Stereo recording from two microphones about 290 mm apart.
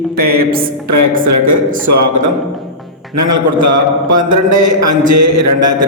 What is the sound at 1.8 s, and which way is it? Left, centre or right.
Speech, right.